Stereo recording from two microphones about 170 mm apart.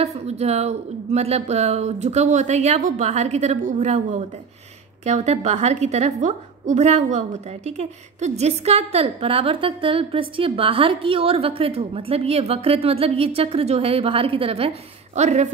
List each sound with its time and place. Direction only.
0.0 s a woman's voice: 40° right (ahead or behind)